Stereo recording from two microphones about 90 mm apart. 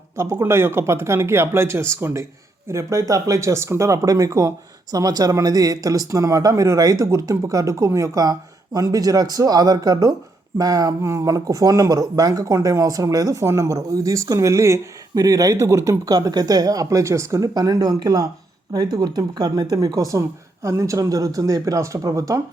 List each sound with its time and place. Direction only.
0.2 s speech: 30° right (ahead or behind)